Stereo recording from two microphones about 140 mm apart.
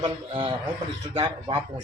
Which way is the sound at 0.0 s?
35° right (ahead or behind).